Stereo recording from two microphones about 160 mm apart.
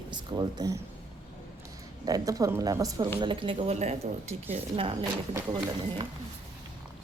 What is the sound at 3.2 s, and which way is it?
A woman's voice, 35° right (ahead or behind).